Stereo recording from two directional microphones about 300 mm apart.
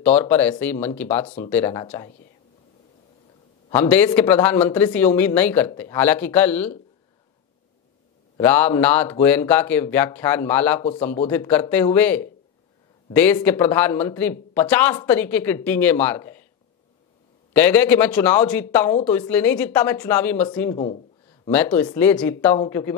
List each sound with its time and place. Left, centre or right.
0.0 s speech: centre
3.7 s speech: centre
8.4 s speech: centre
10.8 s speech: left
11.2 s speech: centre
17.5 s speech: centre
20.7 s speech: centre
21.5 s speech: centre